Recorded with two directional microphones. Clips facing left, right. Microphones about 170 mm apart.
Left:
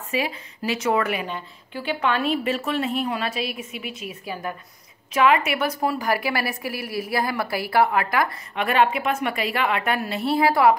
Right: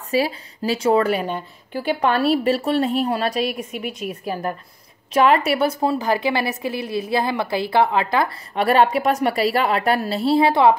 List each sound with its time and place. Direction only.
0.1 s a woman's voice: 35° right (ahead or behind)